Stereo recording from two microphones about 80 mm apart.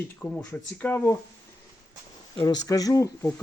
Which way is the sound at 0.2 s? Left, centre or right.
Centre.